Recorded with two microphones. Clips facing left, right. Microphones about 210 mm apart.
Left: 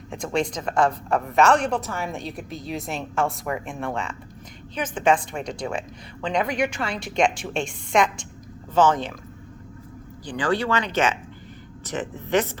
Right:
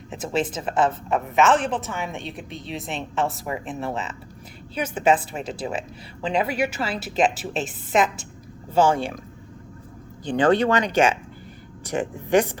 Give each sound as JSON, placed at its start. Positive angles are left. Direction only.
{"t": 0.1, "sound": "a woman's voice", "side_deg": -5}
{"t": 10.2, "sound": "speech", "side_deg": -25}